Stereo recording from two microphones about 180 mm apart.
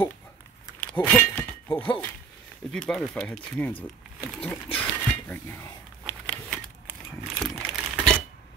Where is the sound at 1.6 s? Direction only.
10° left (ahead or behind).